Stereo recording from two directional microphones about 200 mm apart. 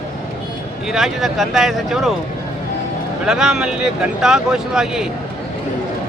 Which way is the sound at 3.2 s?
Centre (ahead or behind).